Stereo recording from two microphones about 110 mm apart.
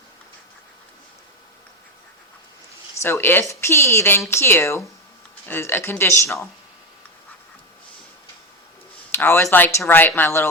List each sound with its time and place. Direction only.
2.9 s speech: 20° left (ahead or behind)
9.1 s speech: 20° left (ahead or behind)